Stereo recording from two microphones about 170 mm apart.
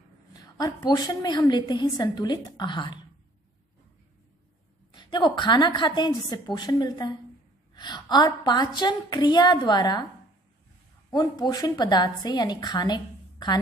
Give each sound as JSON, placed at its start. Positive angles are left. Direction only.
{"t": 0.3, "sound": "a woman's voice", "side_deg": 20}
{"t": 4.9, "sound": "a woman's voice", "side_deg": 25}
{"t": 11.1, "sound": "a woman's voice", "side_deg": 25}